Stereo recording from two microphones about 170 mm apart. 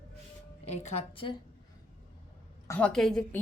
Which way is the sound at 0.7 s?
40° left (ahead or behind).